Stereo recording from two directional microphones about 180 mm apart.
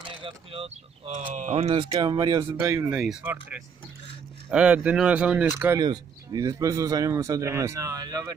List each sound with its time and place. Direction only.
0.2 s speech: 30° right (ahead or behind); by 3.0 s 15° right (ahead or behind)
3.0 s speech: 5° right (ahead or behind)
5.8 s speech: 20° right (ahead or behind)